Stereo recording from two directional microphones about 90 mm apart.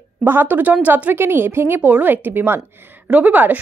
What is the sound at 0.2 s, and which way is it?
Speech, 20° right (ahead or behind).